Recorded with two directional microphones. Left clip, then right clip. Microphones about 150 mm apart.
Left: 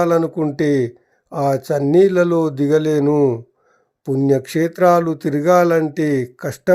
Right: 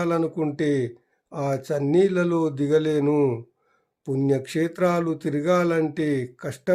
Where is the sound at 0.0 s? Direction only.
45° left (ahead or behind).